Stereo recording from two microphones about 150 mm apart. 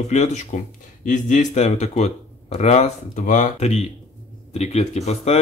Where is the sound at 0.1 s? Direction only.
50° left (ahead or behind).